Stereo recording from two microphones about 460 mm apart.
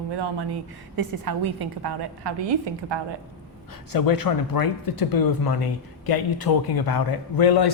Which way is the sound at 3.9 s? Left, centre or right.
Left.